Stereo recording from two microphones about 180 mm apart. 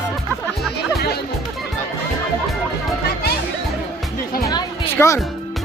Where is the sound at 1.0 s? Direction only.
60° left (ahead or behind).